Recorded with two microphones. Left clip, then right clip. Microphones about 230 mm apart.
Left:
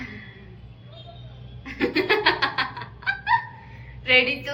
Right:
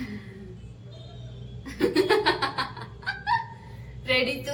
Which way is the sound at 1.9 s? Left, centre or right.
Right.